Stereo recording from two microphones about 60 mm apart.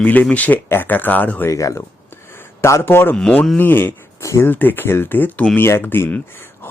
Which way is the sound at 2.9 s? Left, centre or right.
Left.